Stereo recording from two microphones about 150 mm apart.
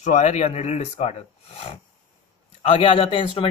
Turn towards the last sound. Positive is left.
turn(degrees=35)  # may be behind; listen again after turning